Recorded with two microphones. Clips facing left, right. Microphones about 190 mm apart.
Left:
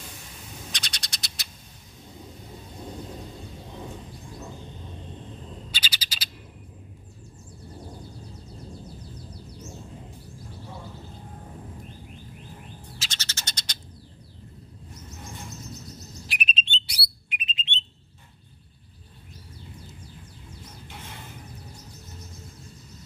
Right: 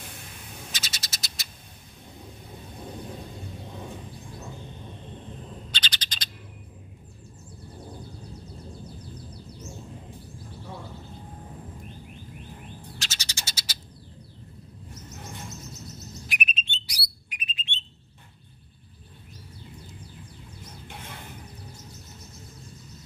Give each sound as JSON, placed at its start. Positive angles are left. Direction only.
{"t": 0.7, "sound": "bird", "side_deg": -5}
{"t": 5.7, "sound": "bird", "side_deg": 10}
{"t": 13.2, "sound": "bird", "side_deg": -10}
{"t": 16.3, "sound": "bird", "side_deg": 30}